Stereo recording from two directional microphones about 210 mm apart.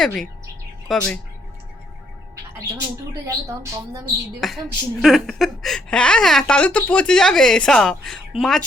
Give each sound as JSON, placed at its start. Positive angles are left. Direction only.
{"t": 0.0, "sound": "speech", "side_deg": 0}
{"t": 3.2, "sound": "a woman's voice", "side_deg": -15}
{"t": 4.4, "sound": "speech", "side_deg": 0}